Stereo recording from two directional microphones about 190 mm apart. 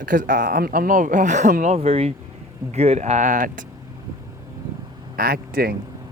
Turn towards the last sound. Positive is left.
turn(degrees=-55)  # may be behind; listen again after turning